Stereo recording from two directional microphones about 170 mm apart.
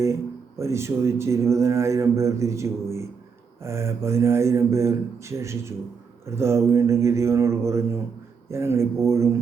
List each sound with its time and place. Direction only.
0.6 s speech: 15° right (ahead or behind)